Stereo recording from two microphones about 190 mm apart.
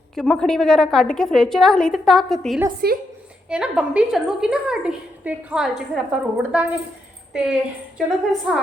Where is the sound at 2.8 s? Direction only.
55° right (ahead or behind).